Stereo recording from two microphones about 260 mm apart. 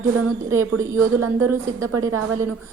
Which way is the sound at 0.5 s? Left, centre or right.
Right.